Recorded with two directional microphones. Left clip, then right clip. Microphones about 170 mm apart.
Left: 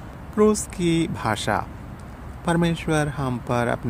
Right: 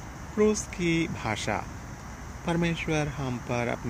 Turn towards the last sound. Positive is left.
turn(degrees=20)  # may be behind; listen again after turning